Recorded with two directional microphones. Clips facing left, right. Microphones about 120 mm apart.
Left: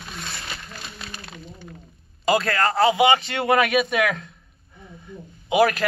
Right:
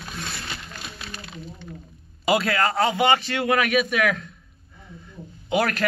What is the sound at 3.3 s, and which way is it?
Speech, 35° left (ahead or behind).